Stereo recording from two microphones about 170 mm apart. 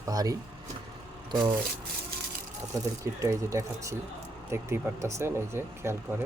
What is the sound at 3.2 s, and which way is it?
Speech, 15° right (ahead or behind).